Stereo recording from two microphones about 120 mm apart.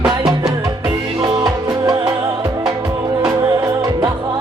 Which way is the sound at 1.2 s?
35° right (ahead or behind).